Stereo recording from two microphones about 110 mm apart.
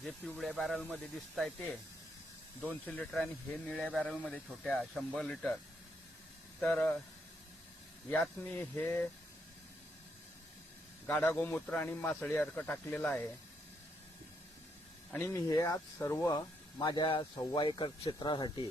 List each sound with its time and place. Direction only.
0.0 s speech: centre (ahead or behind)
2.8 s speech: 10° left (ahead or behind)
6.6 s speech: 10° left (ahead or behind)
8.4 s speech: 15° left (ahead or behind)
11.0 s speech: 15° left (ahead or behind)
15.3 s speech: 30° left (ahead or behind); by 18.6 s 45° left (ahead or behind)